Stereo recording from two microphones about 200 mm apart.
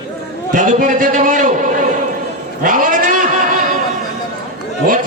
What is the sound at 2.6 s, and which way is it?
Sheep, 40° right (ahead or behind).